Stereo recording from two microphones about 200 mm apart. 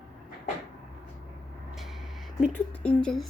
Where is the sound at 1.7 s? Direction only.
Centre (ahead or behind).